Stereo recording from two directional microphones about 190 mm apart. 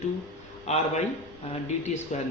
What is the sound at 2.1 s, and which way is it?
Speech, 35° left (ahead or behind).